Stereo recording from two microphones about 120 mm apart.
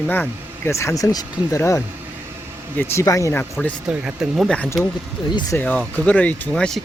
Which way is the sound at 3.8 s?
5° right (ahead or behind).